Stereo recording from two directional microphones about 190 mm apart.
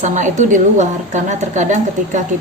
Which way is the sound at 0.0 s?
40° right (ahead or behind).